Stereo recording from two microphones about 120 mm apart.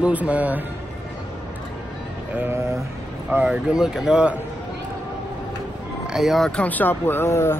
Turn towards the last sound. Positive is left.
turn(degrees=20)  # may be behind; listen again after turning